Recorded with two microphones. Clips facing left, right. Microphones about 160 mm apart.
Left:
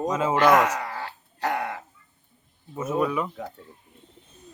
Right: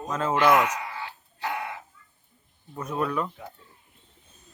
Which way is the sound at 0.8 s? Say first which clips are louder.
Left 3 dB; 75° left (ahead or behind).